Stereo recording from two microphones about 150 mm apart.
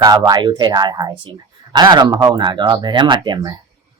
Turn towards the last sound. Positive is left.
turn(degrees=-30)  # may be behind; listen again after turning